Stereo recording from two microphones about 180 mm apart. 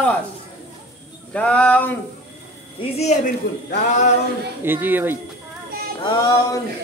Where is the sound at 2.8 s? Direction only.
35° left (ahead or behind).